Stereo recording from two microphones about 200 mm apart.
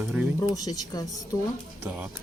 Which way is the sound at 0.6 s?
20° left (ahead or behind).